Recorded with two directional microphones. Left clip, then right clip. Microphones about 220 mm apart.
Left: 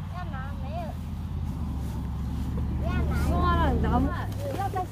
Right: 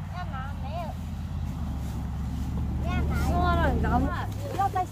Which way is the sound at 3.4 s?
10° right (ahead or behind).